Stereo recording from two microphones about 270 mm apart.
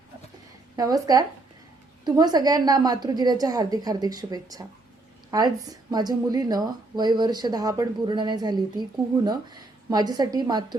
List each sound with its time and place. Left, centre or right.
0.8 s speech: centre